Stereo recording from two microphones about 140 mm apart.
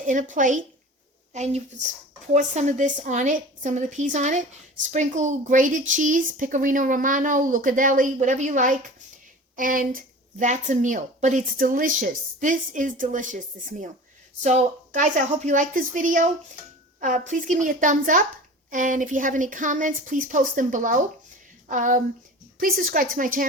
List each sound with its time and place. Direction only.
0.0 s a woman's voice: 65° right (ahead or behind)
9.6 s a woman's voice: 80° right
22.5 s a woman's voice: 85° right